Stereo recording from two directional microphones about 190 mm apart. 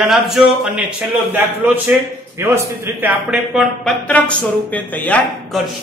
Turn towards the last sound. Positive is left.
turn(degrees=10)  # may be behind; listen again after turning